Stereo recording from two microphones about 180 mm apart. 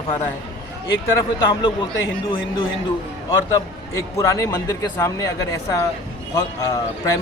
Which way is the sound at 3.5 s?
20° left (ahead or behind).